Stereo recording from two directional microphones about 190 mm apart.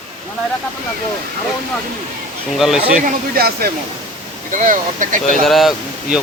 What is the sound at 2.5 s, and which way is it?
Speech, centre (ahead or behind).